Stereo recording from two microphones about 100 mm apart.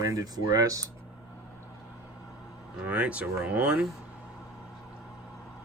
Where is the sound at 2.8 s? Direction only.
10° right (ahead or behind).